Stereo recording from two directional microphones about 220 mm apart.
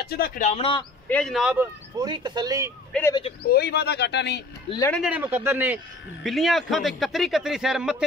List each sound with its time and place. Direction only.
0.0 s speech: 45° left (ahead or behind); by 0.8 s 25° left (ahead or behind)
1.0 s speech: 5° left (ahead or behind)
2.0 s speech: 20° right (ahead or behind)
2.9 s speech: 10° left (ahead or behind)
3.4 s speech: 45° left (ahead or behind)
4.6 s speech: 15° left (ahead or behind)
4.9 s speech: 5° right (ahead or behind)